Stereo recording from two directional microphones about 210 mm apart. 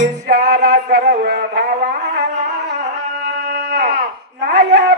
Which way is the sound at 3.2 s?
45° right (ahead or behind).